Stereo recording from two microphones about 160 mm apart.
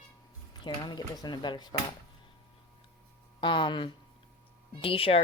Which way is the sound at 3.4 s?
30° left (ahead or behind).